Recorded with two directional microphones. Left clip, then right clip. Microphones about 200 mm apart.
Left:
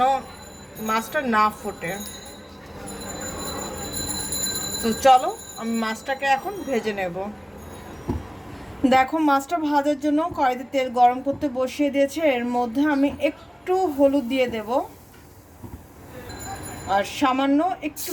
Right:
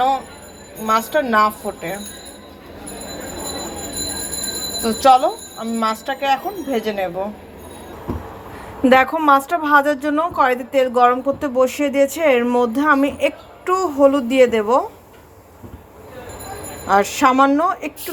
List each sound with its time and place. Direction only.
0.9 s a woman's voice: 5° right (ahead or behind)
4.8 s a woman's voice: centre (ahead or behind)
8.9 s a woman's voice: 10° right (ahead or behind)
16.9 s a woman's voice: 20° right (ahead or behind)